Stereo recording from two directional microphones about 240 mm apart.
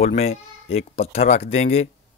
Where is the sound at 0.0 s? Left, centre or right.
Left.